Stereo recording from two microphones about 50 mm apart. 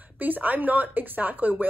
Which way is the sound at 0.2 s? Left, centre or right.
Right.